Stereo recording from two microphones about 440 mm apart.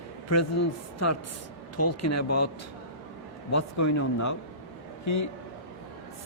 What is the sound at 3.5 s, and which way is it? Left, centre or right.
A man's voice, left.